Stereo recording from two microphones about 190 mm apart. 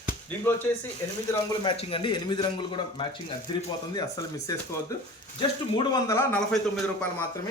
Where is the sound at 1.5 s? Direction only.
25° left (ahead or behind).